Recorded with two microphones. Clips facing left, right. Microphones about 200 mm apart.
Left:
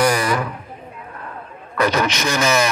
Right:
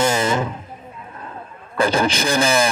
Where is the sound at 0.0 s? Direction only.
25° right (ahead or behind).